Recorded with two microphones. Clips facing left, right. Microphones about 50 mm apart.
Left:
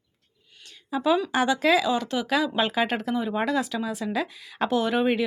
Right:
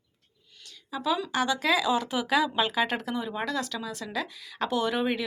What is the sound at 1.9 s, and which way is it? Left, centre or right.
Speech, centre.